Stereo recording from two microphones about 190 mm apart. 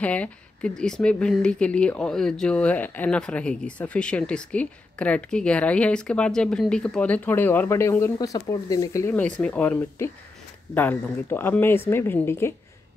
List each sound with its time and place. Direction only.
0.0 s speech: 5° left (ahead or behind)